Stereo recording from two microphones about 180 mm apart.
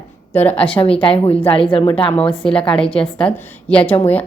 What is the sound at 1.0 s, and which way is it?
Speech, 30° left (ahead or behind).